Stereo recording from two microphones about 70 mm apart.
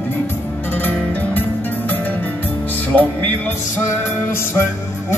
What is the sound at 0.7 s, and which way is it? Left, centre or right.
Music, left.